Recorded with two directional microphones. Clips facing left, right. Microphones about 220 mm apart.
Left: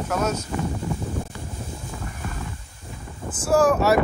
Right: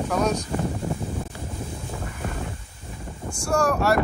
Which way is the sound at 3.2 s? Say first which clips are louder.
Left 4 dB; 5° left (ahead or behind).